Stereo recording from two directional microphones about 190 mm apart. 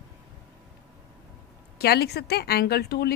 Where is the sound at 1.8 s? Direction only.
55° left (ahead or behind).